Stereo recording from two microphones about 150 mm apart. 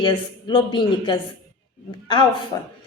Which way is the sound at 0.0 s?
30° left (ahead or behind).